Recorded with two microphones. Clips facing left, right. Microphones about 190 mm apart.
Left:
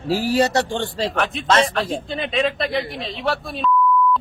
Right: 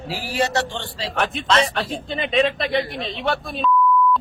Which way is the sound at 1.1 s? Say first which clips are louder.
Even; centre (ahead or behind).